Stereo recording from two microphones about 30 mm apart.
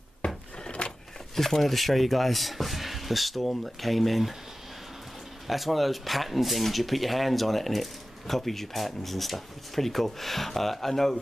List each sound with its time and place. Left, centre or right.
0.2 s wood: left
0.7 s vehicle: left
1.3 s speech: centre
5.5 s speech: centre